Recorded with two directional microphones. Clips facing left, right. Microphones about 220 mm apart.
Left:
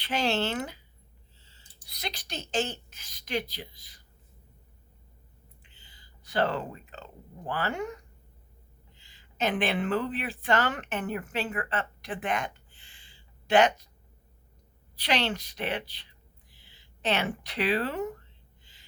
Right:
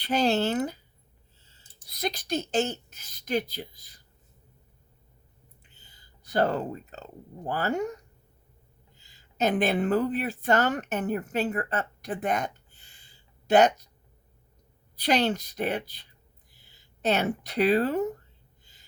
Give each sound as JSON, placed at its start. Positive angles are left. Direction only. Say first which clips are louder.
{"t": 0.0, "sound": "speech", "louder": "right 4 dB", "side_deg": -40}
{"t": 1.5, "sound": "a sound", "louder": "right 2 dB", "side_deg": -45}
{"t": 3.2, "sound": "speech", "louder": "right 4 dB", "side_deg": -40}
{"t": 5.7, "sound": "speech", "louder": "even", "side_deg": -40}
{"t": 15.0, "sound": "speech", "louder": "right 4 dB", "side_deg": -40}
{"t": 18.6, "sound": "gasp", "louder": "even", "side_deg": -40}